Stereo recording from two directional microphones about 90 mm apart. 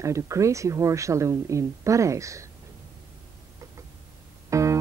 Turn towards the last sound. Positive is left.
turn(degrees=-35)  # may be behind; listen again after turning